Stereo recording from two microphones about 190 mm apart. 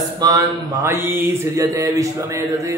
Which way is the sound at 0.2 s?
20° right (ahead or behind).